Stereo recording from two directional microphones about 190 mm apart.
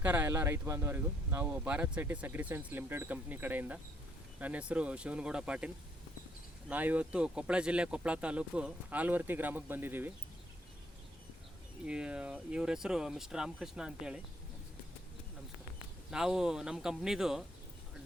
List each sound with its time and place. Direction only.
0.0 s speech: 10° right (ahead or behind)
11.9 s speech: 5° right (ahead or behind)
16.0 s speech: 5° right (ahead or behind)